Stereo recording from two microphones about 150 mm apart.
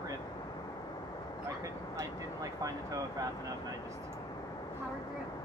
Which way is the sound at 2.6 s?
25° right (ahead or behind).